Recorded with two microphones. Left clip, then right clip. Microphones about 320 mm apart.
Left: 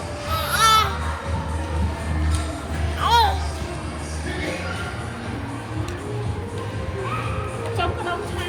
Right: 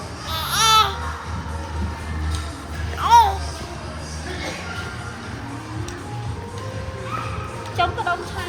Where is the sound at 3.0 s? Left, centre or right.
Centre.